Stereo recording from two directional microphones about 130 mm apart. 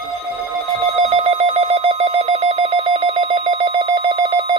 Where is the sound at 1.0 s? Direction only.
55° right (ahead or behind).